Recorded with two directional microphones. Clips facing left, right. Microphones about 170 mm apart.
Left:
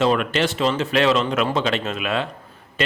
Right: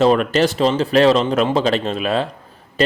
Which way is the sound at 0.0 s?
40° right (ahead or behind).